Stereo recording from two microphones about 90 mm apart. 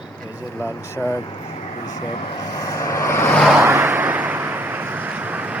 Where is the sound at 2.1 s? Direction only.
50° left (ahead or behind); by 3.3 s 30° left (ahead or behind).